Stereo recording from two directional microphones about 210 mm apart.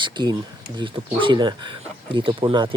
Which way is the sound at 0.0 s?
20° right (ahead or behind).